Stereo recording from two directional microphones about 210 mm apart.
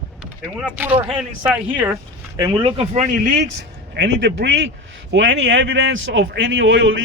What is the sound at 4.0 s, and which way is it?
A man's voice, 55° right (ahead or behind).